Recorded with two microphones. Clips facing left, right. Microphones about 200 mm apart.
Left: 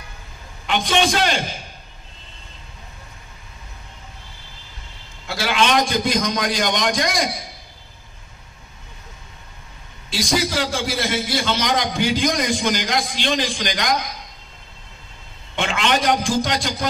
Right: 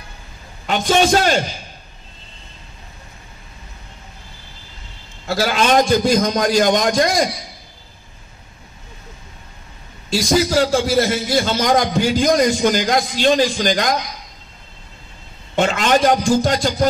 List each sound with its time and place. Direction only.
0.7 s a man's voice: 40° right (ahead or behind)
5.2 s a man's voice: 45° right (ahead or behind)
10.0 s a man's voice: 40° right (ahead or behind)
15.5 s a man's voice: 40° right (ahead or behind)